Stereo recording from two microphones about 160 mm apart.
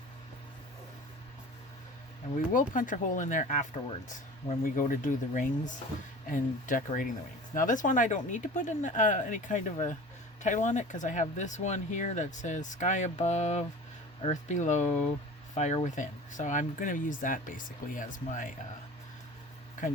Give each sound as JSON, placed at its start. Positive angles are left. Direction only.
{"t": 2.5, "sound": "speech", "side_deg": 55}